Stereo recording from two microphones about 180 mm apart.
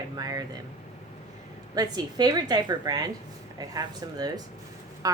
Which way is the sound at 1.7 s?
20° right (ahead or behind).